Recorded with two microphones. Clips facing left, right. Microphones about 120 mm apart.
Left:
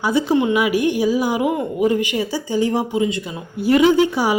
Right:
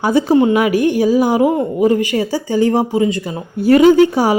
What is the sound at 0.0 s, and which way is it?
A woman's voice, 45° right (ahead or behind).